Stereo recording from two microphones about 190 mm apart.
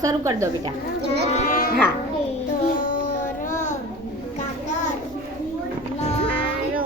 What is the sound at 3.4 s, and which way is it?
Child singing, 40° left (ahead or behind).